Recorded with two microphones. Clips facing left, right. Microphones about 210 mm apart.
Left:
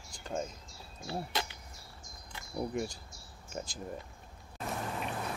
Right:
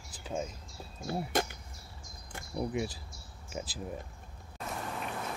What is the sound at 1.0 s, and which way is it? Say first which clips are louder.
Speech: right 5 dB; 50° right (ahead or behind).